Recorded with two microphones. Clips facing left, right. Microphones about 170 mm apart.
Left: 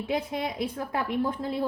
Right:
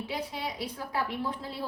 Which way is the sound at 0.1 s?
50° left (ahead or behind).